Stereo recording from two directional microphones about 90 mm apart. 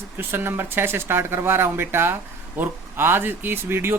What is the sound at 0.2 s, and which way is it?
Speech, 25° right (ahead or behind).